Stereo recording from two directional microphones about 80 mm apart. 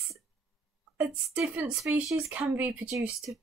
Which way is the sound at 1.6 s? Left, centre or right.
Centre.